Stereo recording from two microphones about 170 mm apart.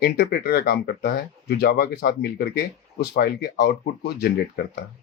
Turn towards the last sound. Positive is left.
turn(degrees=70)  # may be behind; listen again after turning